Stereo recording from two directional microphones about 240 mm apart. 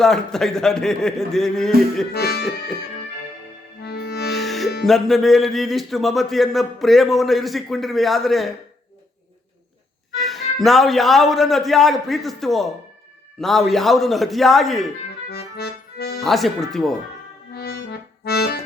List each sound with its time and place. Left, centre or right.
0.0 s a man's voice: centre
2.1 s music: left
3.8 s accordion: left
4.4 s music: centre
4.9 s a man's voice: centre
10.2 s a man's voice: centre
15.3 s accordion: left
16.2 s a man's voice: centre
17.5 s accordion: left